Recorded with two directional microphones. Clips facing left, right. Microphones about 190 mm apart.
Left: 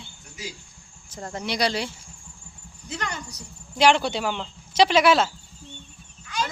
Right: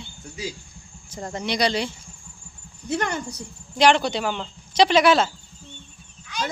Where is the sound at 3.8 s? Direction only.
5° left (ahead or behind).